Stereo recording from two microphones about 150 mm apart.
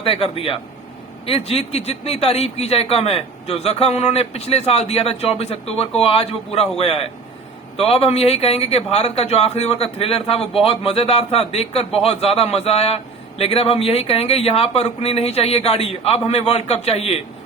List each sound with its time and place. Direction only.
0.0 s a man's voice: 40° left (ahead or behind)